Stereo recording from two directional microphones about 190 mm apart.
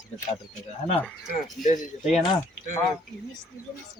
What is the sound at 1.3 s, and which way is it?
Speech, 40° left (ahead or behind).